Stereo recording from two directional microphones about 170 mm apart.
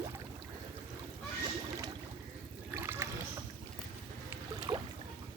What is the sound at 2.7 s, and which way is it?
Trickle, 15° right (ahead or behind).